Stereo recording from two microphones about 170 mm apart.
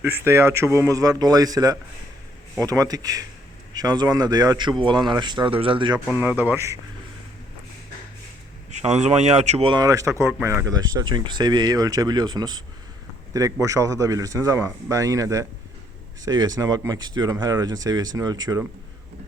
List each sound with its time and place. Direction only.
0.0 s speech: 15° right (ahead or behind); by 6.0 s 30° right (ahead or behind)
6.1 s speech: 10° right (ahead or behind)
8.7 s speech: 40° right (ahead or behind); by 18.6 s 25° right (ahead or behind)